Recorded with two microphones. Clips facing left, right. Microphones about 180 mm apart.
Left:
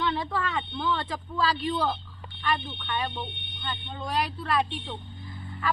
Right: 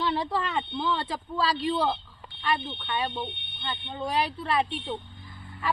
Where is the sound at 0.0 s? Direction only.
30° right (ahead or behind).